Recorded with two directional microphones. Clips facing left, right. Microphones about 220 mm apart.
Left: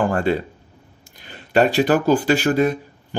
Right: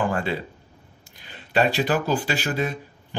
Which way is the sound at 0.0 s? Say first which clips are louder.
Left 5 dB; 50° left (ahead or behind).